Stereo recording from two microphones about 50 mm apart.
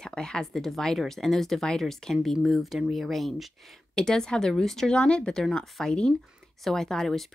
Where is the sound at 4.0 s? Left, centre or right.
Centre.